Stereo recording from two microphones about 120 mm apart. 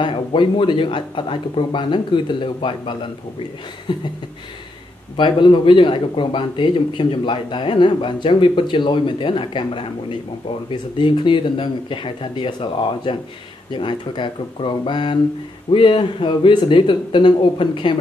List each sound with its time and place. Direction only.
0.0 s speech: 45° left (ahead or behind)
5.1 s speech: 45° left (ahead or behind)